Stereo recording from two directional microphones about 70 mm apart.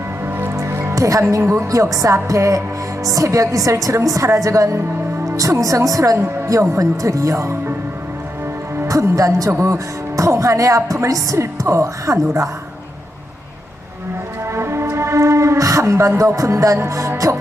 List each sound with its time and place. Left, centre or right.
0.5 s music: right
0.9 s a woman's voice: right
8.9 s speech: right
14.5 s music: right
15.8 s speech: right